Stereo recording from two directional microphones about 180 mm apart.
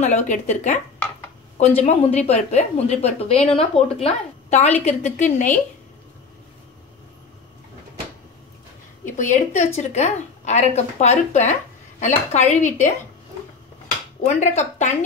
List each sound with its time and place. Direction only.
0.0 s a woman's voice: 40° left (ahead or behind)
1.8 s a woman's voice: 35° left (ahead or behind)
9.1 s a woman's voice: 40° left (ahead or behind)
14.2 s a woman's voice: 40° left (ahead or behind)